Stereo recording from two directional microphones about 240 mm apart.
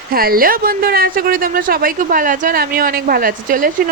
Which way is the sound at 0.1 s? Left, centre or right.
Right.